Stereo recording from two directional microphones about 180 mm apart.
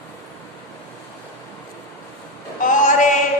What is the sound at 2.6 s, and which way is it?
Female singing, 45° left (ahead or behind).